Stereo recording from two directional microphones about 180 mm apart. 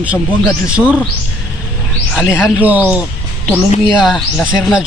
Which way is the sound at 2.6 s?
10° right (ahead or behind).